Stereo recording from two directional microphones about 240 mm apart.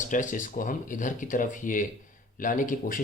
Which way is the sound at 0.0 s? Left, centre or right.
Left.